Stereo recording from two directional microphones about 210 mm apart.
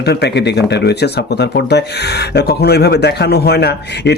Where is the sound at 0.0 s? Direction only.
50° left (ahead or behind).